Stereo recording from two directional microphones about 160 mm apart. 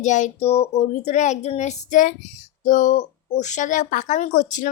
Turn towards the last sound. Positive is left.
turn(degrees=50)  # may be behind; listen again after turning